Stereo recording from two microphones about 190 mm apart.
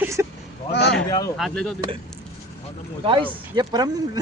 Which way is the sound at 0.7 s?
65° left (ahead or behind).